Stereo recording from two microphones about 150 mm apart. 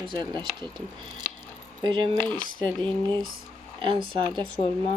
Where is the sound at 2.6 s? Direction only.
10° left (ahead or behind).